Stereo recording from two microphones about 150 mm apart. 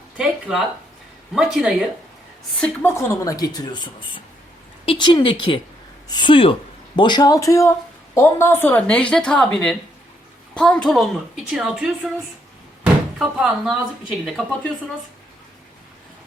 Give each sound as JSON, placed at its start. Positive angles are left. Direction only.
{"t": 0.2, "sound": "a woman's voice", "side_deg": -5}
{"t": 2.9, "sound": "a woman's voice", "side_deg": 20}
{"t": 12.8, "sound": "door", "side_deg": -5}
{"t": 14.4, "sound": "a woman's voice", "side_deg": 5}